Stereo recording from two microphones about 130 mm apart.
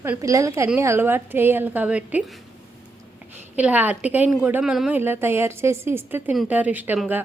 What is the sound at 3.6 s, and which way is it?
A woman's voice, 10° right (ahead or behind).